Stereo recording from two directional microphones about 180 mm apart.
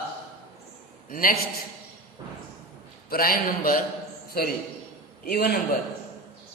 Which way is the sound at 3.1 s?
55° left (ahead or behind).